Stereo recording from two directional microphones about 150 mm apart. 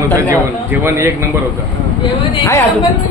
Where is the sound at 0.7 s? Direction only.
15° right (ahead or behind).